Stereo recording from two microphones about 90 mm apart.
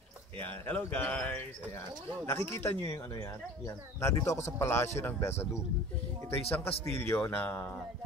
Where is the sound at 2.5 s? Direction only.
30° left (ahead or behind).